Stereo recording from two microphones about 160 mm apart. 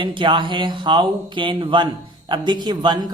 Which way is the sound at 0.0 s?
30° right (ahead or behind).